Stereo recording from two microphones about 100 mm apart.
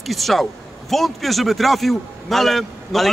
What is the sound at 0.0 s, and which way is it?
Speech, centre (ahead or behind).